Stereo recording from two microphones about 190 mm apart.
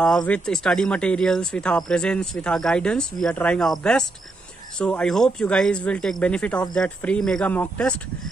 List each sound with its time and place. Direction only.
0.3 s speech: 5° left (ahead or behind)